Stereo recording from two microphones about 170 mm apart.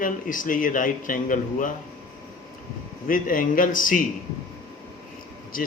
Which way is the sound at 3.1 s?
55° left (ahead or behind).